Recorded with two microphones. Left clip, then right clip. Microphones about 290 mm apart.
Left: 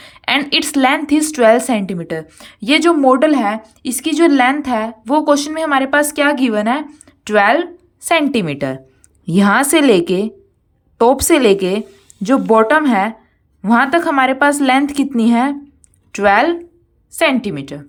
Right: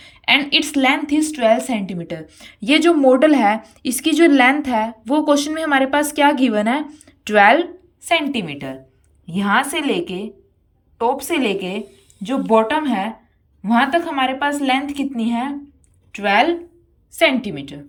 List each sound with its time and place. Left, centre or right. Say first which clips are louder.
0.0 s a sound: even; centre
0.8 s a woman's voice: left 3 dB; centre
9.9 s a woman's voice: left 9 dB; centre